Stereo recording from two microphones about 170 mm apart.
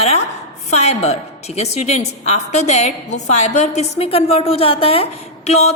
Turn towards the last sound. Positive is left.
turn(degrees=40)  # may be behind; listen again after turning